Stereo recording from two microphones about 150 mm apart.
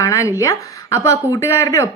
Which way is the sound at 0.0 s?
20° left (ahead or behind).